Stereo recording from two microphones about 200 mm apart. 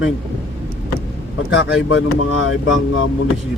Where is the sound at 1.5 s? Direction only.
75° left (ahead or behind).